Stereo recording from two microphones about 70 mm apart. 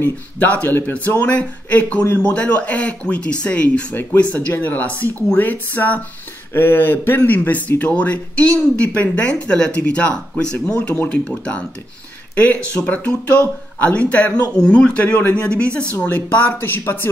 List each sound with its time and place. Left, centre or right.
0.0 s speech: left
16.0 s speech: left